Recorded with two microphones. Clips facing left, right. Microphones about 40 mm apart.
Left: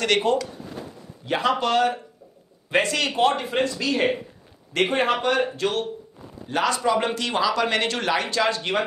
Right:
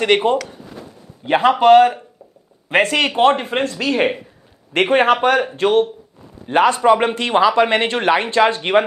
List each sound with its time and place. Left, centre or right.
0.0 s speech: right
1.2 s a man's voice: right
5.6 s speech: right